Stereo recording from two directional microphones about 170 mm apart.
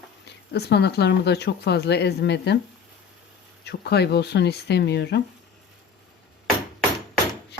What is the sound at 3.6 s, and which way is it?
Speech, 75° left (ahead or behind).